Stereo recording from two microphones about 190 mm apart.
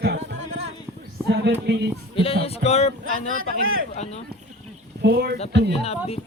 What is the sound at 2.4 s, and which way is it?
Speech, 35° left (ahead or behind).